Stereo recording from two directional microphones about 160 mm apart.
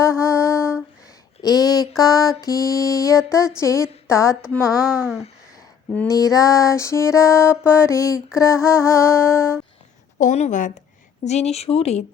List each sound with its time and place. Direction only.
0.0 s mantra: 15° left (ahead or behind)
1.4 s a sound: 25° left (ahead or behind)
2.0 s music: 20° left (ahead or behind)
4.7 s speech: 5° right (ahead or behind)
6.1 s music: 20° left (ahead or behind)
8.4 s a sound: 20° left (ahead or behind)
10.2 s a woman's voice: 50° left (ahead or behind)